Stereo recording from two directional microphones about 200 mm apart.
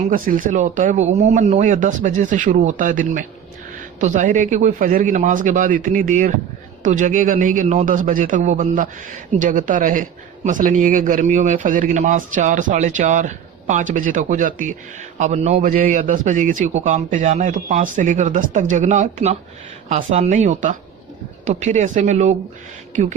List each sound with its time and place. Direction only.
0.0 s speech: 45° right (ahead or behind)